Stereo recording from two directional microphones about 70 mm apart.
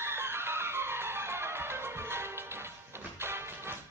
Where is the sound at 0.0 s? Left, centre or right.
Right.